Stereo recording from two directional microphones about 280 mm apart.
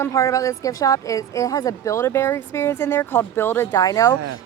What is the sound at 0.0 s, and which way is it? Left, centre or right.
Speech, centre.